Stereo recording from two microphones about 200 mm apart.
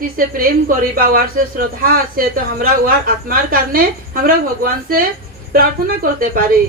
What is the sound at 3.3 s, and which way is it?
Speech, 45° right (ahead or behind).